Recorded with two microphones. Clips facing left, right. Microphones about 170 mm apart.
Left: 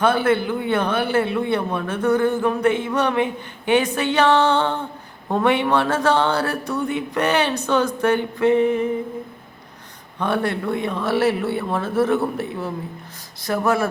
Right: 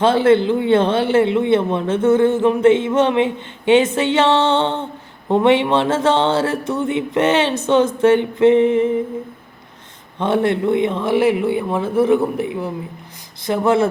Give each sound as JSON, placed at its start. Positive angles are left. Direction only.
{"t": 0.0, "sound": "a man's voice", "side_deg": -25}
{"t": 10.2, "sound": "a man's voice", "side_deg": -20}